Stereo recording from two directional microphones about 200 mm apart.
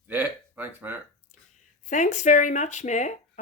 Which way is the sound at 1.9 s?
40° left (ahead or behind).